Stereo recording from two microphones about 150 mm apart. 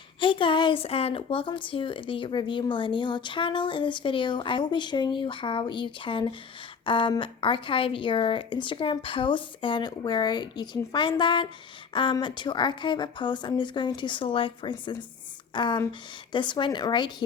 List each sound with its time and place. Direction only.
0.2 s speech: 35° left (ahead or behind)